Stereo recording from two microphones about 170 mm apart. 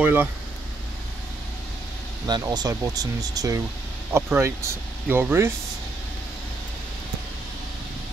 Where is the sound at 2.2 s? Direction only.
25° right (ahead or behind).